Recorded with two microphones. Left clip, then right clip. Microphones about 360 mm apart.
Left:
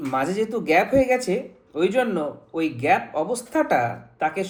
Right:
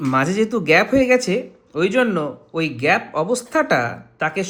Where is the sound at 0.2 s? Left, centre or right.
Right.